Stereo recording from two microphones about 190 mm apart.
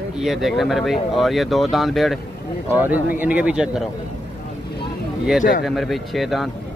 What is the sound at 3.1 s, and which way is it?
Speech, 5° right (ahead or behind).